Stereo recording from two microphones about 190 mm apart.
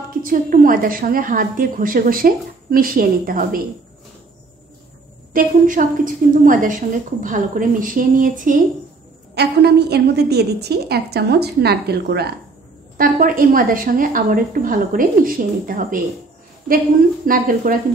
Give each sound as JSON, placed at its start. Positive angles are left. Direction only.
{"t": 0.2, "sound": "a woman's voice", "side_deg": -45}
{"t": 5.3, "sound": "a woman's voice", "side_deg": -45}
{"t": 9.3, "sound": "a woman's voice", "side_deg": -60}
{"t": 12.9, "sound": "a woman's voice", "side_deg": -45}
{"t": 17.3, "sound": "a woman's voice", "side_deg": -50}